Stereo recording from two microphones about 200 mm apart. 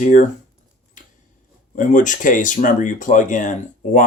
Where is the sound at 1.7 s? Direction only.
40° left (ahead or behind).